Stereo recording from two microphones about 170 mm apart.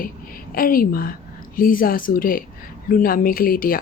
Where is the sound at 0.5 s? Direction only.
60° left (ahead or behind).